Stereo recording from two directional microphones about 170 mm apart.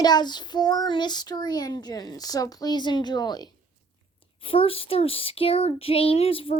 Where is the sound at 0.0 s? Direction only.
25° left (ahead or behind).